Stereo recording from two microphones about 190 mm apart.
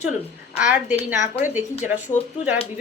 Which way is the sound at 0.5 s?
10° right (ahead or behind).